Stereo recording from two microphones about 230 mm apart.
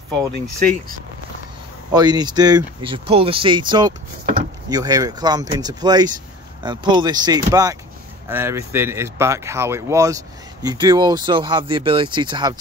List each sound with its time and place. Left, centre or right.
1.9 s speech: centre